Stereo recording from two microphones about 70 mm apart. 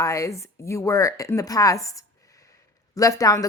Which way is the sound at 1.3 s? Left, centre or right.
Left.